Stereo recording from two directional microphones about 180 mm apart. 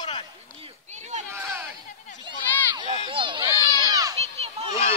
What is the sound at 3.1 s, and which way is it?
Speech, 25° right (ahead or behind).